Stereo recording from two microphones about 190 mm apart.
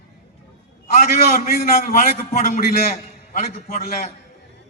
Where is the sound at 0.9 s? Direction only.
50° left (ahead or behind).